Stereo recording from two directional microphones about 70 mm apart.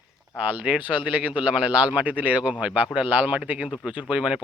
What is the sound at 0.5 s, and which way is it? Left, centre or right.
Speech, right.